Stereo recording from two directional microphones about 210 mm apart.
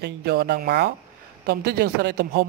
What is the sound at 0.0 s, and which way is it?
Speech, 50° right (ahead or behind).